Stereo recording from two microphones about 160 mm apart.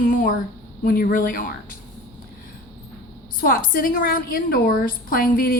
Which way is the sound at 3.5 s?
65° left (ahead or behind).